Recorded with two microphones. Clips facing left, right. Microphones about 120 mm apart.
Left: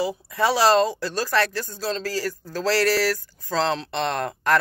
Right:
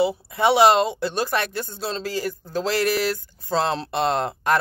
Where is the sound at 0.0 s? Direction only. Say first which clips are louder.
Right 3 dB; 25° right (ahead or behind).